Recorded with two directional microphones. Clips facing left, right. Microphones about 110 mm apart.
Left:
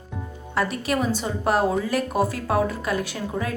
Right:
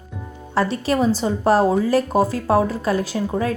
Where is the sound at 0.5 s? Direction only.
30° right (ahead or behind).